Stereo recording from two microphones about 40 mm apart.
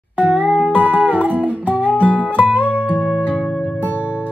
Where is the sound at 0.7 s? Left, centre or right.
Right.